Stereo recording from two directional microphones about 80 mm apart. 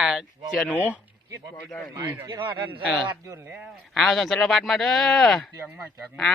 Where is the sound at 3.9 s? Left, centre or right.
Centre.